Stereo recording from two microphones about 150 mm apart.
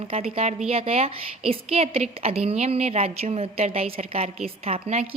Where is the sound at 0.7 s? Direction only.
40° right (ahead or behind).